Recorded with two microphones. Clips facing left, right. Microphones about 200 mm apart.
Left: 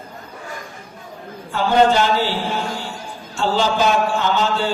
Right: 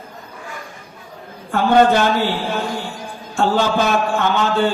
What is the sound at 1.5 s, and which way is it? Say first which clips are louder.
A man's voice: right 2 dB; 55° right (ahead or behind).